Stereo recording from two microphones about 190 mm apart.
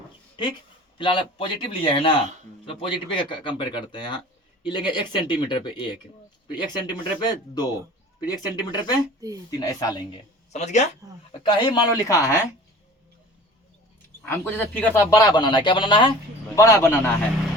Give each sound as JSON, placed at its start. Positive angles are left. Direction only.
{"t": 0.9, "sound": "speech", "side_deg": 25}
{"t": 10.5, "sound": "speech", "side_deg": 35}
{"t": 11.4, "sound": "speech", "side_deg": 25}
{"t": 14.2, "sound": "speech", "side_deg": 10}
{"t": 15.1, "sound": "speech", "side_deg": 20}
{"t": 16.6, "sound": "speech", "side_deg": 15}